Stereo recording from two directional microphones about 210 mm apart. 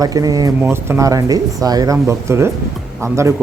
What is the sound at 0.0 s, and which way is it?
Speech, 15° right (ahead or behind).